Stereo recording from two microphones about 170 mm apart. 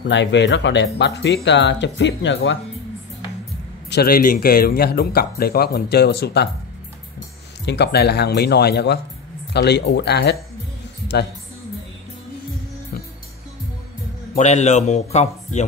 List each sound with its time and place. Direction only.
0.1 s speech: 90° left
3.9 s speech: 65° left (ahead or behind)
7.6 s speech: 80° left
14.3 s speech: 40° left (ahead or behind)